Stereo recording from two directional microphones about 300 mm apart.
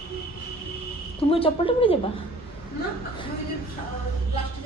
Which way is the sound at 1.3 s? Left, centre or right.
Centre.